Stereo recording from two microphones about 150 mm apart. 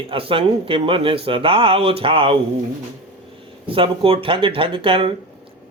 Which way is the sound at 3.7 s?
35° right (ahead or behind).